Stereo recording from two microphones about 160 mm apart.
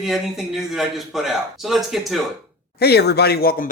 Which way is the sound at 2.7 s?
90° left.